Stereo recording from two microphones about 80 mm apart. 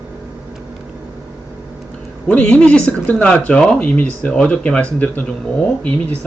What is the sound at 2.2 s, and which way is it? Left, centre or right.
Speech, centre.